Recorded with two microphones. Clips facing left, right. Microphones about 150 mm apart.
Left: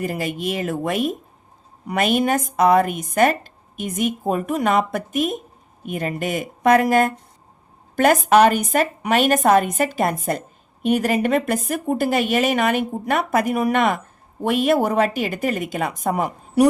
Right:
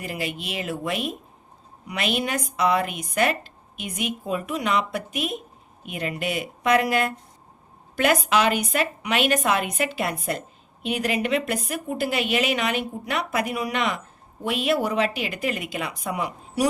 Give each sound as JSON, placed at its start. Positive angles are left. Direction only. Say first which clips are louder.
{"t": 0.0, "sound": "speech", "louder": "left 6 dB", "side_deg": 45}